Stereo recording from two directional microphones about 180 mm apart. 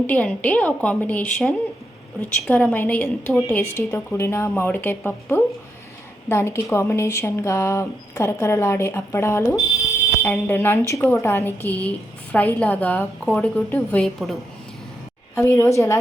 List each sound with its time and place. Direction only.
0.1 s speech: 10° left (ahead or behind)
15.4 s speech: 15° left (ahead or behind)